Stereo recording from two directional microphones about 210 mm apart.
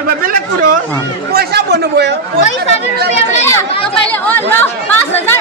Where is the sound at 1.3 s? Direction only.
50° right (ahead or behind).